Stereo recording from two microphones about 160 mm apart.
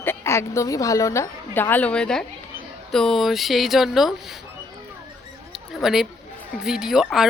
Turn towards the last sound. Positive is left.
turn(degrees=0)  # may be behind; listen again after turning